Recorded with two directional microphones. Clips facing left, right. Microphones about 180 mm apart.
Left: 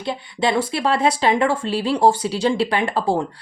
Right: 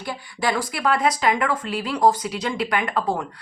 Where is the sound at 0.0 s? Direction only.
25° left (ahead or behind).